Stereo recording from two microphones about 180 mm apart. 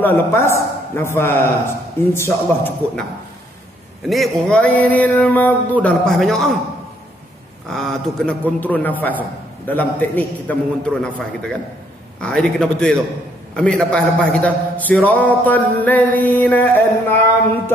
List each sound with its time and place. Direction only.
0.0 s a man's voice: 15° left (ahead or behind)
4.1 s a man's voice: 5° left (ahead or behind)
7.7 s a man's voice: 5° left (ahead or behind)